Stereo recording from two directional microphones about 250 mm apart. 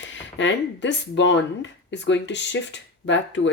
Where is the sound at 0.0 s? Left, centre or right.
Left.